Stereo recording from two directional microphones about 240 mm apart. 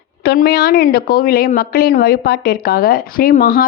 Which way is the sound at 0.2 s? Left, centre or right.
Left.